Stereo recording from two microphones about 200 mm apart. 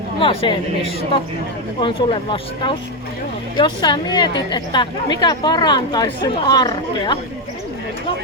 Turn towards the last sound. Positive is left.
turn(degrees=20)  # may be behind; listen again after turning